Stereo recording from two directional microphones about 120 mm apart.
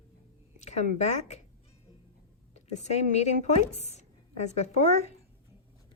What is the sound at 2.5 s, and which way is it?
A woman's voice, 65° left (ahead or behind).